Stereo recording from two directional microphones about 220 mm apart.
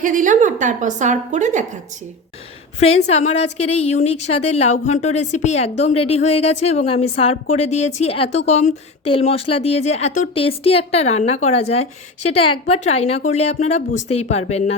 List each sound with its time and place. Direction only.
0.0 s a woman's voice: 35° right (ahead or behind)
2.8 s a woman's voice: 30° left (ahead or behind)